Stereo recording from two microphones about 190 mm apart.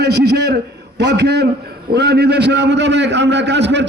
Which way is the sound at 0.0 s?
60° right (ahead or behind).